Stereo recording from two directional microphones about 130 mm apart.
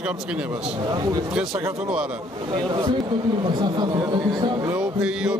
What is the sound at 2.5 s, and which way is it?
Speech, 35° right (ahead or behind).